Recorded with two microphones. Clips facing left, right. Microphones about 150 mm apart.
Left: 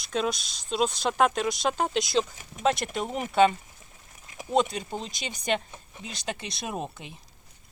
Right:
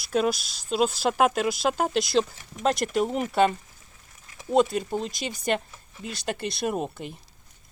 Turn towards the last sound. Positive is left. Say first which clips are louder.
# right 6 dB
turn(degrees=0)  # may be behind; listen again after turning